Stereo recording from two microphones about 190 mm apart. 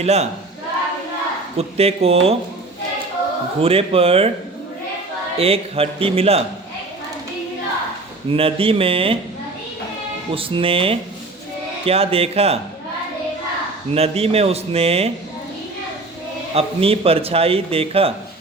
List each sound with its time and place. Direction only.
0.0 s a man's voice: 35° right (ahead or behind)
1.5 s a man's voice: 35° right (ahead or behind)
3.6 s a man's voice: 30° right (ahead or behind)
5.4 s a man's voice: 30° right (ahead or behind)
8.3 s speech: 30° right (ahead or behind)
10.3 s a man's voice: 30° right (ahead or behind)
13.9 s a man's voice: 30° right (ahead or behind)
16.6 s a man's voice: 30° right (ahead or behind)